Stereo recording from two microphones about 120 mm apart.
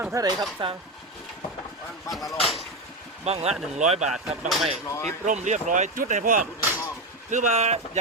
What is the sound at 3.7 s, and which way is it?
Speech, 75° right (ahead or behind).